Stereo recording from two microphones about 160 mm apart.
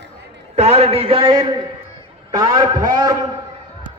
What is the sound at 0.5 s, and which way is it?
A man's voice, 40° right (ahead or behind).